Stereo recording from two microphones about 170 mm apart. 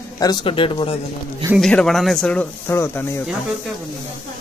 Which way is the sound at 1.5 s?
5° left (ahead or behind).